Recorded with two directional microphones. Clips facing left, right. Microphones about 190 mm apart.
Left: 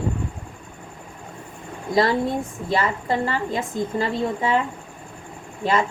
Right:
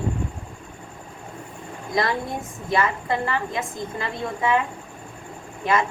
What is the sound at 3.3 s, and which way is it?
A woman's voice, 30° left (ahead or behind).